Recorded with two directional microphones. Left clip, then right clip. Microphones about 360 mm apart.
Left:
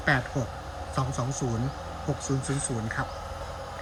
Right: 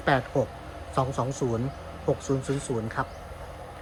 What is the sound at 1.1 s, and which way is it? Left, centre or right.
Speech, centre.